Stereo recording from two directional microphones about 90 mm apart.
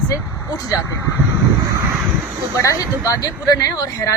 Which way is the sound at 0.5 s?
40° left (ahead or behind).